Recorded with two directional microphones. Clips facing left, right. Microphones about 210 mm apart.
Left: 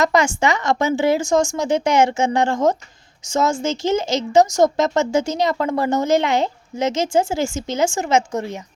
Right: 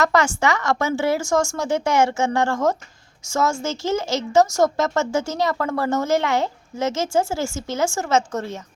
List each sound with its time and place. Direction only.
0.0 s a woman's voice: 15° left (ahead or behind)